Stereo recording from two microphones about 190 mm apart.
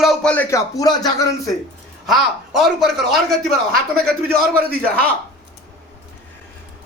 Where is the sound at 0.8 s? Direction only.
20° left (ahead or behind).